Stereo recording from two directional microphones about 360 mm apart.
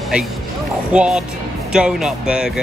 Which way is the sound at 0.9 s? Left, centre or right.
Centre.